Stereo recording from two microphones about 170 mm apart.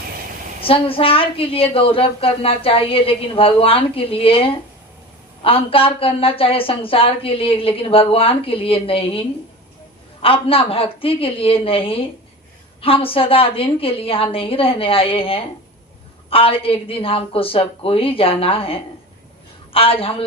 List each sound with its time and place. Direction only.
0.6 s a woman's voice: 35° left (ahead or behind)